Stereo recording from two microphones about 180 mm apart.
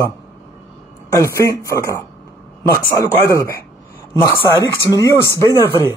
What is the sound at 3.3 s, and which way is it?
Speech, 15° left (ahead or behind).